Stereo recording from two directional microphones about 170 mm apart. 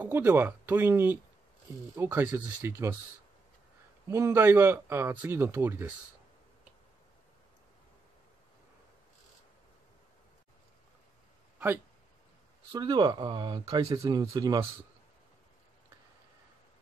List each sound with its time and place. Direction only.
0.0 s speech: 10° right (ahead or behind)
4.1 s speech: 15° right (ahead or behind)
11.5 s a sound: 10° right (ahead or behind)
12.7 s speech: 25° right (ahead or behind)